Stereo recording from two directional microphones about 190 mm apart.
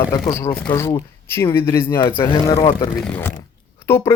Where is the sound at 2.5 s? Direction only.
30° left (ahead or behind).